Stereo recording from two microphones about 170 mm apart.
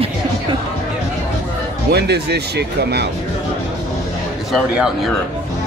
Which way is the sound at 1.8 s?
75° right (ahead or behind).